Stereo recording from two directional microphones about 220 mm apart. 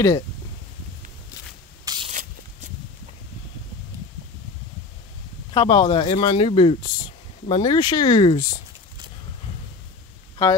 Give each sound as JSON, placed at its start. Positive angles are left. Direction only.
{"t": 1.9, "sound": "spray", "side_deg": -20}
{"t": 5.5, "sound": "speech", "side_deg": 25}